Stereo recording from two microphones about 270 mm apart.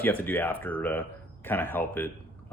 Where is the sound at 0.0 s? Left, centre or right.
Centre.